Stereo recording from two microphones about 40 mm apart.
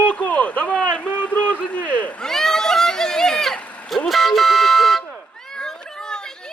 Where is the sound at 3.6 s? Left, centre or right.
Left.